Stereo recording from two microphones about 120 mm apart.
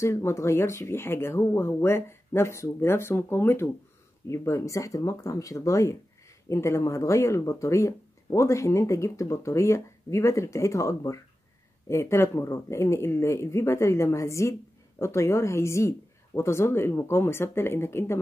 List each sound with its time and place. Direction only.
0.0 s speech: 20° left (ahead or behind)